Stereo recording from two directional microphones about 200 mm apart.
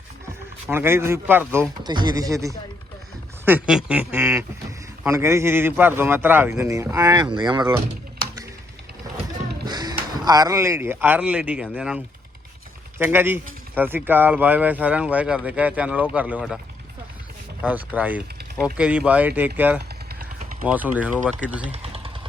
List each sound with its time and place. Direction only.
0.7 s speech: 10° right (ahead or behind)
3.4 s speech: 5° right (ahead or behind)
9.6 s speech: 20° right (ahead or behind); by 16.6 s 5° right (ahead or behind)
17.6 s speech: 10° right (ahead or behind)
21.7 s a sound: 30° right (ahead or behind)